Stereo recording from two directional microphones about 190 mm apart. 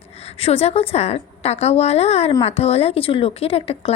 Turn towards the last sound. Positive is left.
turn(degrees=30)  # may be behind; listen again after turning